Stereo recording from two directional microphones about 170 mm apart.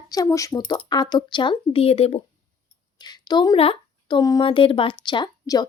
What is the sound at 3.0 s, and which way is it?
Speech, 25° left (ahead or behind).